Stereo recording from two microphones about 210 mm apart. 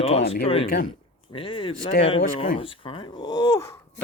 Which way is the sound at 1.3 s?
25° left (ahead or behind).